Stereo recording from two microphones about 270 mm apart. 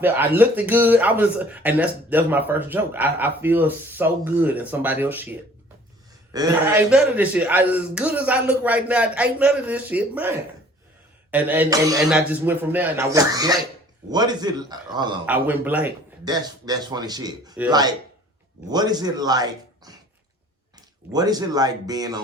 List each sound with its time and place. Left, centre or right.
0.3 s speech: centre
6.3 s speech: centre
15.3 s a man's voice: centre
21.1 s speech: centre